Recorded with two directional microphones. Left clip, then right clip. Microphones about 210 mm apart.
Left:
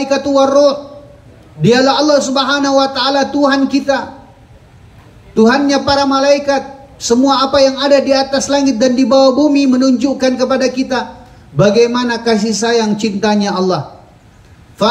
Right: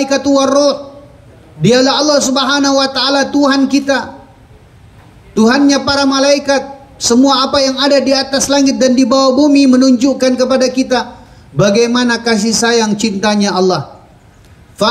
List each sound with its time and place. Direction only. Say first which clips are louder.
0.0 s a man's voice: even; 50° right (ahead or behind)
5.3 s a man's voice: even; 50° right (ahead or behind)